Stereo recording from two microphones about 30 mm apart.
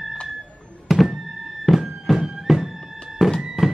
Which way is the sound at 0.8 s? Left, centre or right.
Centre.